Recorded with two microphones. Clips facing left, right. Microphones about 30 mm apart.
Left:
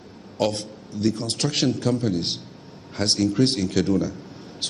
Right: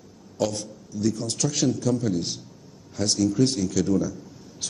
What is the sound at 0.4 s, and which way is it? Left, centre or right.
A man's voice, left.